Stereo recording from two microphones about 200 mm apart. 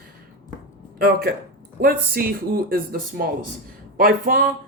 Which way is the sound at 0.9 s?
50° right (ahead or behind).